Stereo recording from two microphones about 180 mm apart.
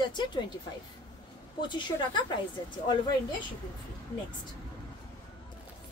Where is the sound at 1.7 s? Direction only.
25° left (ahead or behind).